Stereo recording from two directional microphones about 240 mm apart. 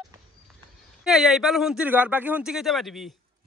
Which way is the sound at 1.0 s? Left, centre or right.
Centre.